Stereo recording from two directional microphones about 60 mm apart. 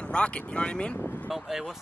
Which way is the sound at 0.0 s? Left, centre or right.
Centre.